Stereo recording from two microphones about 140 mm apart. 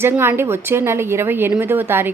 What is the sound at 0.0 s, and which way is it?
A woman's voice, 15° right (ahead or behind).